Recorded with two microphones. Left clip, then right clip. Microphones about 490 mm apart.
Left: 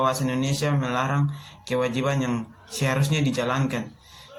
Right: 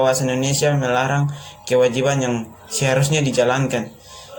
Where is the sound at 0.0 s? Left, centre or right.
Left.